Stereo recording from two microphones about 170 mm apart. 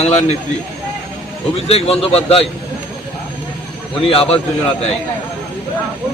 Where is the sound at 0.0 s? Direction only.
40° left (ahead or behind).